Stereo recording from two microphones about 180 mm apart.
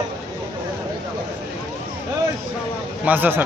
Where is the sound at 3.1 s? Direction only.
10° right (ahead or behind).